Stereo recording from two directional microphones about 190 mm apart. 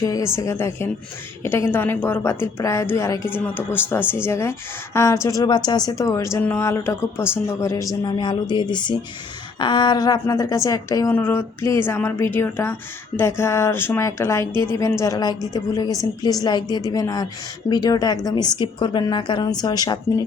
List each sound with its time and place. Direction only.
0.0 s a woman's voice: 15° left (ahead or behind)